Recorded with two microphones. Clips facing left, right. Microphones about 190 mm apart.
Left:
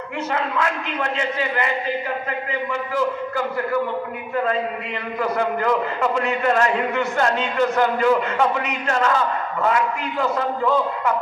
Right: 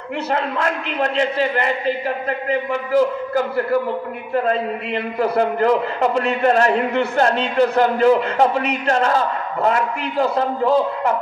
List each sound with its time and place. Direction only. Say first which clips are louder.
0.3 s a man's voice: right 2 dB; 40° right (ahead or behind)
5.2 s a man's voice: right 4 dB; 35° right (ahead or behind)